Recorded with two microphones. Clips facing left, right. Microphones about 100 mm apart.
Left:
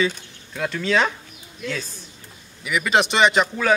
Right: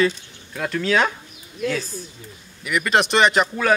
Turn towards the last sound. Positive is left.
turn(degrees=0)  # may be behind; listen again after turning